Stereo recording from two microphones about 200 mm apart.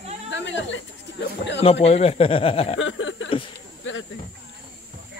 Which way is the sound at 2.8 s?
70° left (ahead or behind).